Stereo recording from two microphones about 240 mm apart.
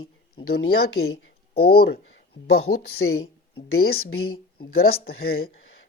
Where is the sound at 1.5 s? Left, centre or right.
Left.